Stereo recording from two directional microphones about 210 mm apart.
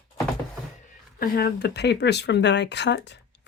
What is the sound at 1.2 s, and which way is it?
Speech, 45° left (ahead or behind).